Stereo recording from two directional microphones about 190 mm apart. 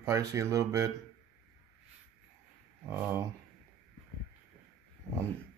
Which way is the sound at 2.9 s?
10° right (ahead or behind).